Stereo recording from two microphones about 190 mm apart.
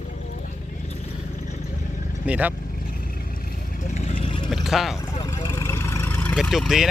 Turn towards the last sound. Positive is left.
turn(degrees=0)  # may be behind; listen again after turning